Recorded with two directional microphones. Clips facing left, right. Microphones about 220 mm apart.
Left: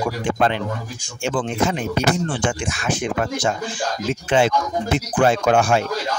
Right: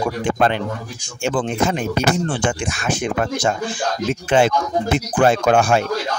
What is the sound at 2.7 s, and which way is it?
Speech, 45° right (ahead or behind).